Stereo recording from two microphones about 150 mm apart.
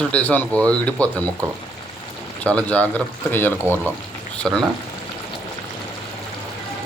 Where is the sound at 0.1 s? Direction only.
10° left (ahead or behind).